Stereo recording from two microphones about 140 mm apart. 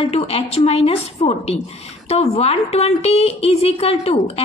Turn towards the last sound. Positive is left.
turn(degrees=45)  # may be behind; listen again after turning